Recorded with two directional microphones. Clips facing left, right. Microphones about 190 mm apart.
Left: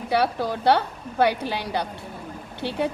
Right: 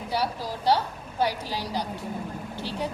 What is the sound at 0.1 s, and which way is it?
A woman's voice, 60° left (ahead or behind).